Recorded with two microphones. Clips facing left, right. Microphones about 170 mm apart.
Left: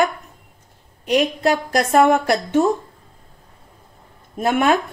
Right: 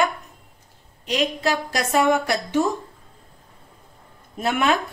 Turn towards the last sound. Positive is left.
turn(degrees=45)  # may be behind; listen again after turning